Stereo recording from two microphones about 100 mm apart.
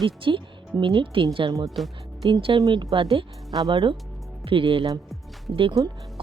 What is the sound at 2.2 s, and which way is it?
Speech, 60° right (ahead or behind).